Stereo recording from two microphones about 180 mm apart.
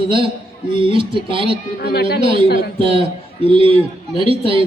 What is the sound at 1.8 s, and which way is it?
Speech, 65° left (ahead or behind).